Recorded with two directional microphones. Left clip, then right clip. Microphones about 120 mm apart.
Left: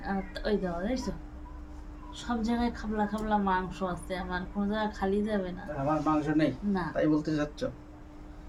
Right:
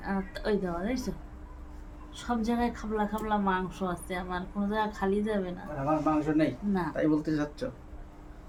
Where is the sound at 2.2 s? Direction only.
45° right (ahead or behind).